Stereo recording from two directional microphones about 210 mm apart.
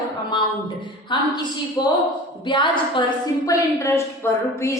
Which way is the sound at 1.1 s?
25° left (ahead or behind).